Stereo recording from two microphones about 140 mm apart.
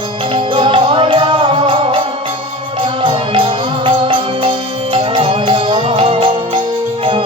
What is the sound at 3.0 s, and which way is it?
Music, 40° right (ahead or behind).